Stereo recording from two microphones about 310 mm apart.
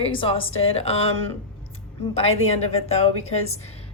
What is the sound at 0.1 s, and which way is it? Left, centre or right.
Speech, centre.